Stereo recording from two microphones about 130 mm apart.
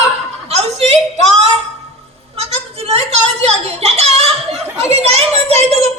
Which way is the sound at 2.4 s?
50° right (ahead or behind).